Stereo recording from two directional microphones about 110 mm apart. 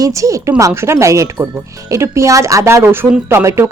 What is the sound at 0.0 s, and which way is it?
Speech, 30° right (ahead or behind).